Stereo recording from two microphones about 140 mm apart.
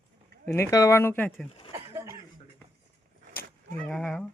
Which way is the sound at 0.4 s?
20° left (ahead or behind).